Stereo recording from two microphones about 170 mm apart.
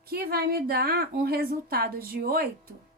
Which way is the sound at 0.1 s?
65° right (ahead or behind).